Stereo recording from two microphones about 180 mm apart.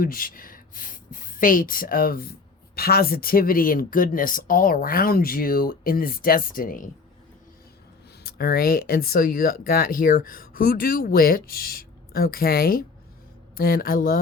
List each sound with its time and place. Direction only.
0.0 s speech: 50° left (ahead or behind)
8.2 s speech: 60° left (ahead or behind)